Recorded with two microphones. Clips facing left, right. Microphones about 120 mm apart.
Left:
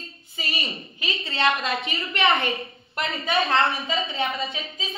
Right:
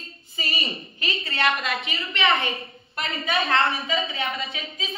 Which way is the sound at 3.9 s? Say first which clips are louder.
Right 1 dB; centre (ahead or behind).